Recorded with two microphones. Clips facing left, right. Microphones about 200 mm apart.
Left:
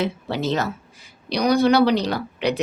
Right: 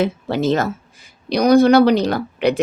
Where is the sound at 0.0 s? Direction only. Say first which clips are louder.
Right 5 dB; 50° right (ahead or behind).